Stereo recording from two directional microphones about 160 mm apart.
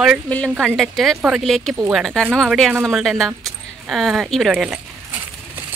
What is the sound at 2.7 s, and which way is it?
Speech, 15° right (ahead or behind).